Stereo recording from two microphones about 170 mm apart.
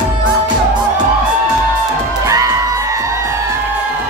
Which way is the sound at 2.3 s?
20° right (ahead or behind).